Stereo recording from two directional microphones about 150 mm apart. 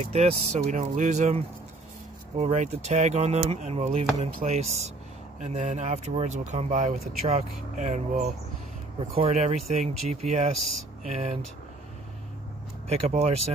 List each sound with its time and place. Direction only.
0.0 s speech: 45° right (ahead or behind)
12.8 s speech: 45° right (ahead or behind)